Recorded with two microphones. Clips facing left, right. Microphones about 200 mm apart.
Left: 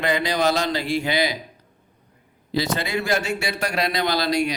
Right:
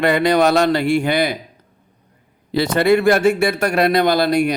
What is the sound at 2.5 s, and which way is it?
Speech, 60° right (ahead or behind).